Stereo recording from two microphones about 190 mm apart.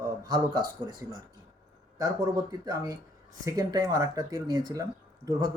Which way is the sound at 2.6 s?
20° right (ahead or behind).